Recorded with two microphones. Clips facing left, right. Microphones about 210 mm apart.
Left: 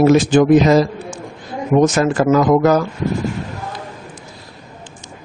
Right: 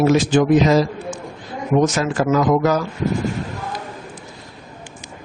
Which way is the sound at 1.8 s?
50° left (ahead or behind).